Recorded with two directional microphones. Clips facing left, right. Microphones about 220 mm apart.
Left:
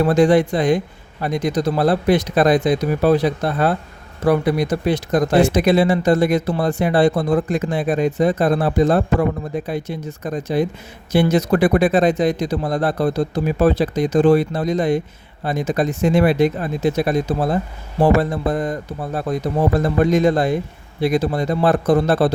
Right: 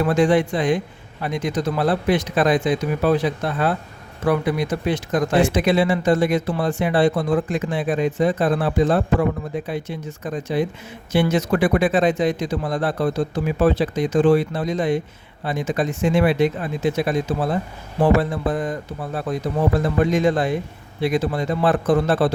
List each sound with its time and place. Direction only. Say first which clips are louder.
0.0 s speech: left 3 dB; 40° left (ahead or behind)